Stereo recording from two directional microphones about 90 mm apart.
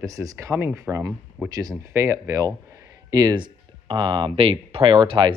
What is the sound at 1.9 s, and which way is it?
Speech, 30° right (ahead or behind).